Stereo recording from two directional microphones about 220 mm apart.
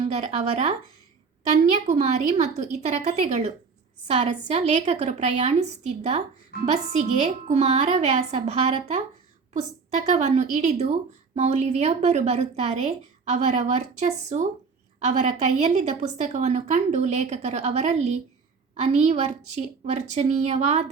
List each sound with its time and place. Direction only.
0.1 s a woman's voice: 30° right (ahead or behind)
1.9 s a woman's voice: 30° right (ahead or behind)